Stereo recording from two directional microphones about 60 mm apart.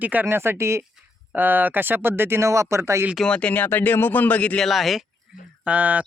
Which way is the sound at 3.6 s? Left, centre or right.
Left.